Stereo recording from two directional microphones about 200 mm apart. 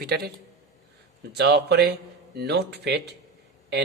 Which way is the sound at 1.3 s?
55° right (ahead or behind).